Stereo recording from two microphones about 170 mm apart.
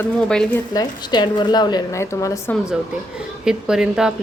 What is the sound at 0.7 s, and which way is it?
A woman's voice, 25° left (ahead or behind).